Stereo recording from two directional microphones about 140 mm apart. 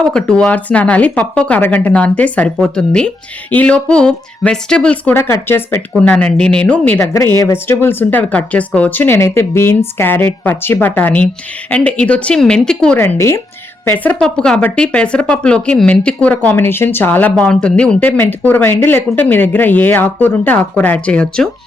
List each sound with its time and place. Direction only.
0.1 s speech: 5° left (ahead or behind)
7.1 s speech: 25° left (ahead or behind); by 13.0 s 5° left (ahead or behind)
13.0 s speech: 20° left (ahead or behind)